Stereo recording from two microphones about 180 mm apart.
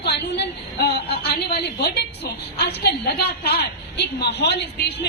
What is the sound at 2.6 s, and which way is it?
A woman's voice, 65° left (ahead or behind).